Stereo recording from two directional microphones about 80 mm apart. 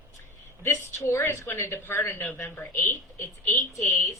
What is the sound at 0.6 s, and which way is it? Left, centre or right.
Speech, left.